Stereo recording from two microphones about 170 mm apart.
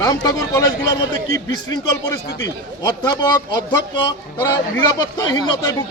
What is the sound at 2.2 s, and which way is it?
Speech, 90° left.